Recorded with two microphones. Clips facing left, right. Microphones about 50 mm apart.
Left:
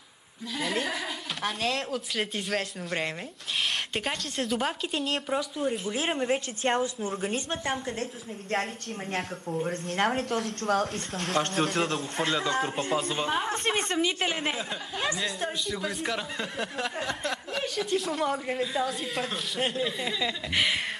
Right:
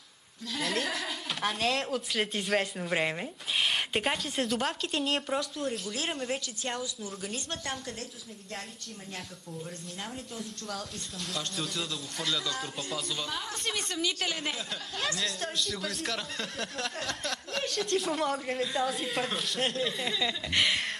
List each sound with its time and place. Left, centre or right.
0.6 s a woman's voice: centre
4.5 s speech: centre
5.9 s speech: left
6.6 s a man's voice: left
9.1 s speech: left
9.9 s a woman's voice: left
10.6 s a man's voice: left
15.0 s speech: centre